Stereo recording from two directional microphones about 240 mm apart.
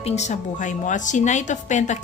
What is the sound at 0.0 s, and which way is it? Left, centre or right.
A woman's voice, left.